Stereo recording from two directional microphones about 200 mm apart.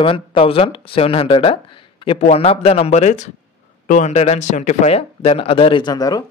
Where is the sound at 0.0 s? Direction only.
25° left (ahead or behind).